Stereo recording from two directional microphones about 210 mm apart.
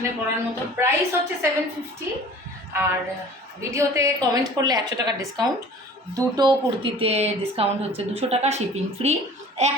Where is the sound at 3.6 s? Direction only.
15° right (ahead or behind).